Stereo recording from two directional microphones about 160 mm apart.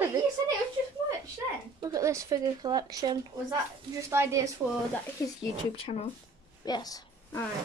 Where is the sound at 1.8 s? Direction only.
20° right (ahead or behind).